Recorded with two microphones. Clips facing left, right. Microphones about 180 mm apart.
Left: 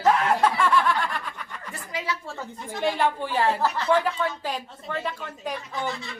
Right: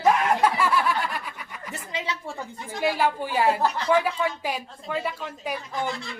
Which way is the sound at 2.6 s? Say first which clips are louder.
Even; 5° right (ahead or behind).